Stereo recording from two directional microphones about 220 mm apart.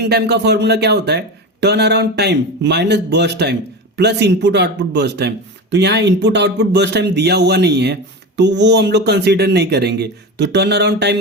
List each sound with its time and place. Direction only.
0.0 s speech: 50° right (ahead or behind)